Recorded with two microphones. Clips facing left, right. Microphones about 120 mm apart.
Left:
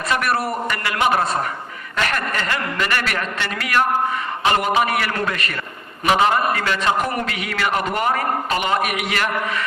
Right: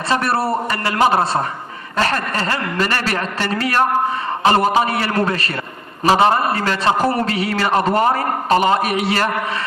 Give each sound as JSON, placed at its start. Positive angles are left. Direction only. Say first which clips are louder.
{"t": 0.1, "sound": "a man's voice", "louder": "right 3 dB", "side_deg": -30}